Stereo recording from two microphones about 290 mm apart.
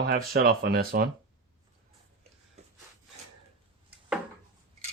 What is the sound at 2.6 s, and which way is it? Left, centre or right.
Wood, right.